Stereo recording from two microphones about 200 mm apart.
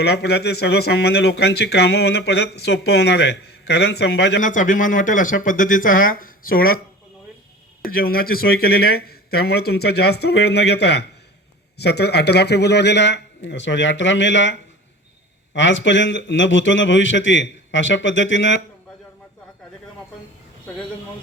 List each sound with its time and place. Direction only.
0.0 s speech: 55° left (ahead or behind)
4.4 s a man's voice: 40° left (ahead or behind)
7.9 s speech: 50° left (ahead or behind); by 18.6 s 65° left (ahead or behind)